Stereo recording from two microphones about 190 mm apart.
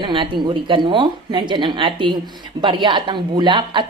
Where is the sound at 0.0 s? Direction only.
25° right (ahead or behind).